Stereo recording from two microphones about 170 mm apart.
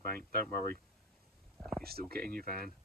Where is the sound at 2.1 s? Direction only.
60° right (ahead or behind).